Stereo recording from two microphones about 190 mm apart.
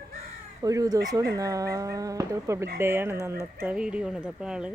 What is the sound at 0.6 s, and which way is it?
Speech, 20° right (ahead or behind).